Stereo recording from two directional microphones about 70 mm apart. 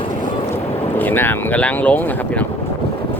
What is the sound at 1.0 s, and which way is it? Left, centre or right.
Speech, left.